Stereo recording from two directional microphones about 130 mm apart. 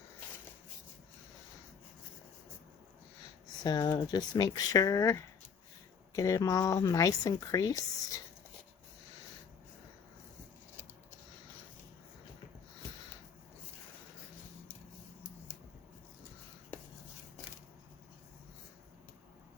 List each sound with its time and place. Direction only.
3.6 s speech: 30° left (ahead or behind)